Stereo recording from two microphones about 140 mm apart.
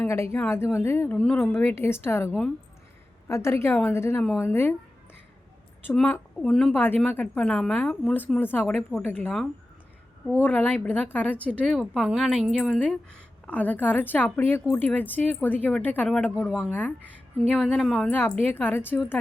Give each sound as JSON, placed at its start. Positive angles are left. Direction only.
{"t": 0.0, "sound": "a woman's voice", "side_deg": 20}
{"t": 5.8, "sound": "speech", "side_deg": 10}
{"t": 10.3, "sound": "a woman's voice", "side_deg": 10}
{"t": 13.4, "sound": "speech", "side_deg": 10}
{"t": 17.5, "sound": "a woman's voice", "side_deg": 5}
{"t": 18.1, "sound": "speech", "side_deg": 15}